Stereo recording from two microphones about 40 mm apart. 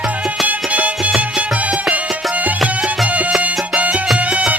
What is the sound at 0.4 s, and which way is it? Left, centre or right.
Music, right.